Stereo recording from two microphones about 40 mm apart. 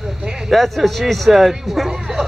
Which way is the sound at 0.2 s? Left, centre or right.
Right.